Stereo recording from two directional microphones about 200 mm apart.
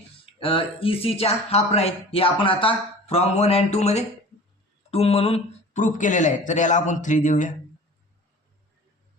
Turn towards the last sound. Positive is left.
turn(degrees=40)  # may be behind; listen again after turning